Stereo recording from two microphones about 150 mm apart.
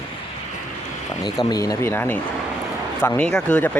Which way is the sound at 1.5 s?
25° left (ahead or behind).